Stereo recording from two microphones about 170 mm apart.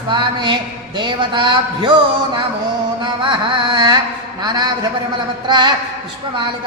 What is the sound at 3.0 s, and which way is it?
A man's voice, 30° right (ahead or behind).